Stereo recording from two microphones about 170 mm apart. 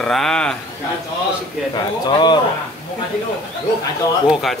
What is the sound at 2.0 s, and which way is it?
Speech, 25° left (ahead or behind).